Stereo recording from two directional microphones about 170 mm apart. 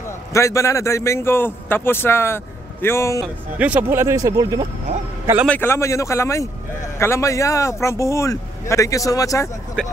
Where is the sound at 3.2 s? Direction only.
10° right (ahead or behind).